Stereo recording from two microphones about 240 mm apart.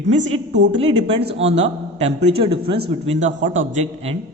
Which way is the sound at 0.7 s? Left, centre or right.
Right.